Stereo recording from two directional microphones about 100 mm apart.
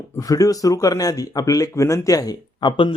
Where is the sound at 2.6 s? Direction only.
55° left (ahead or behind).